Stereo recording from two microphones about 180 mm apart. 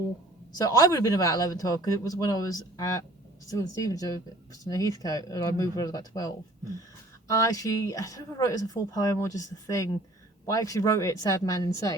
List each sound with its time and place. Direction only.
0.5 s speech: 20° left (ahead or behind)